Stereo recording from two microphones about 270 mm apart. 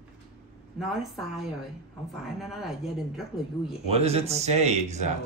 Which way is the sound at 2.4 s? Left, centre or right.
Centre.